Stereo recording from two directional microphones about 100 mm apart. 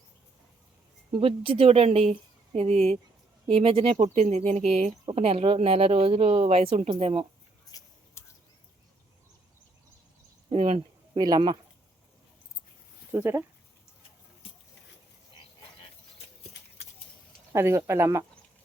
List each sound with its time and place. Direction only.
1.1 s speech: 65° right (ahead or behind)
7.7 s a sound: 35° left (ahead or behind)
10.5 s a sound: 75° right (ahead or behind)
11.2 s speech: 45° right (ahead or behind)
13.1 s speech: 25° right (ahead or behind)
17.5 s speech: 30° right (ahead or behind)